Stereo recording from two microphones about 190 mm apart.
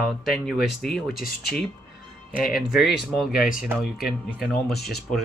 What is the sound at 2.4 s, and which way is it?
Speech, centre (ahead or behind).